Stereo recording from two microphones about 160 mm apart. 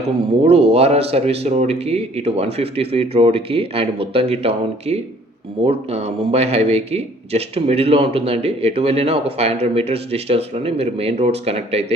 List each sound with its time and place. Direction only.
0.4 s a man's voice: 40° right (ahead or behind)